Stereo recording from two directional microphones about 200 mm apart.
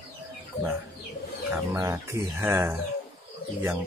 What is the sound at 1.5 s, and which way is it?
Chicken, 10° right (ahead or behind).